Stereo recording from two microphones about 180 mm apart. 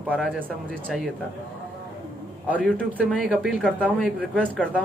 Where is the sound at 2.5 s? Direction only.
10° left (ahead or behind).